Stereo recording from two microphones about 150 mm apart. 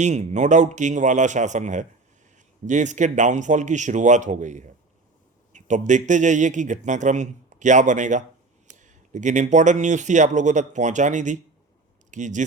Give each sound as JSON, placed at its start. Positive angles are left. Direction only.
{"t": 0.0, "sound": "a man's voice", "side_deg": -50}